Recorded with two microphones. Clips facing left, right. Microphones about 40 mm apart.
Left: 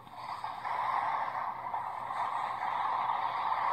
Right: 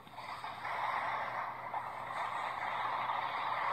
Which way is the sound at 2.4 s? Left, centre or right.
Right.